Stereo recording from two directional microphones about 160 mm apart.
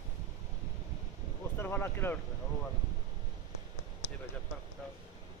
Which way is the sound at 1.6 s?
15° left (ahead or behind).